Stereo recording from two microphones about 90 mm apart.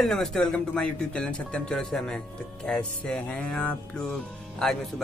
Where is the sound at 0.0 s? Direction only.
5° left (ahead or behind).